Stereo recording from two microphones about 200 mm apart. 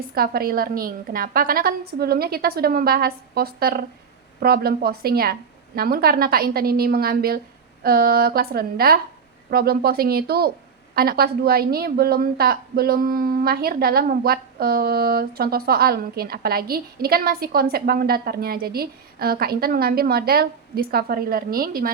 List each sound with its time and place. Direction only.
0.1 s a woman's voice: 50° right (ahead or behind)